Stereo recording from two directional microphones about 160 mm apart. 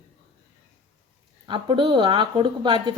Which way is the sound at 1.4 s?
30° right (ahead or behind).